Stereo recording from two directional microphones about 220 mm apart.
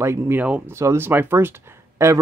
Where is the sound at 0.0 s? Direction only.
10° right (ahead or behind).